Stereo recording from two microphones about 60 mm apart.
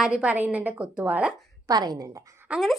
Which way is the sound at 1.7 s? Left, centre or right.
Right.